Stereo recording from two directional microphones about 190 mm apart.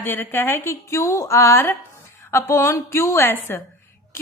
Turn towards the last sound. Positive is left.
turn(degrees=10)  # may be behind; listen again after turning